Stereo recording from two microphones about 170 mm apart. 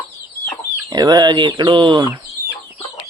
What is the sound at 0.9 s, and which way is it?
Speech, 25° right (ahead or behind).